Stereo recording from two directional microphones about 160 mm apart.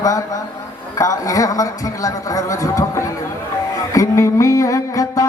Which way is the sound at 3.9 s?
20° left (ahead or behind).